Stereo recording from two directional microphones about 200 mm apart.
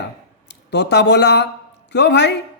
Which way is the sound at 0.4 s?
60° left (ahead or behind).